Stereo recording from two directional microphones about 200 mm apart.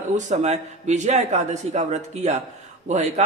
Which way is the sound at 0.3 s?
35° right (ahead or behind).